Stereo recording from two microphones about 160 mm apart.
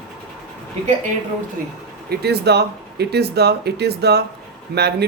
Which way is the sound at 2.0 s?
90° right.